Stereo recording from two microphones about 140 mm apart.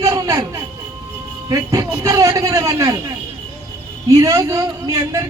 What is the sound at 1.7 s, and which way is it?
A man's voice, 25° right (ahead or behind).